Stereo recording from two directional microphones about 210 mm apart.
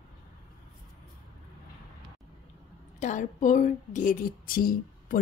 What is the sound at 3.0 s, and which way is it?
Speech, 35° left (ahead or behind).